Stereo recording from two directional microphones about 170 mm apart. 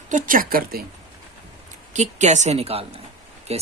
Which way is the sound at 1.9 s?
45° right (ahead or behind).